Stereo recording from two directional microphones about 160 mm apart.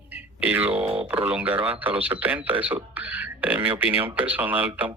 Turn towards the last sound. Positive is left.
turn(degrees=-10)  # may be behind; listen again after turning